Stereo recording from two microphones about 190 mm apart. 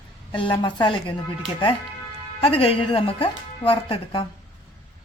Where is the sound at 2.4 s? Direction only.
30° left (ahead or behind).